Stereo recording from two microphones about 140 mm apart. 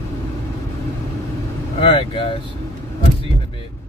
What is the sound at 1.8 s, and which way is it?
Speech, 40° left (ahead or behind).